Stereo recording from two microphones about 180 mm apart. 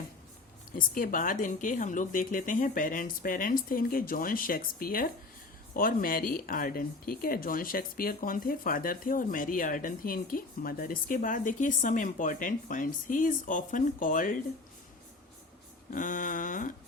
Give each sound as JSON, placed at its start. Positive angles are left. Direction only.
{"t": 0.8, "sound": "speech", "side_deg": 50}
{"t": 15.9, "sound": "speech", "side_deg": 45}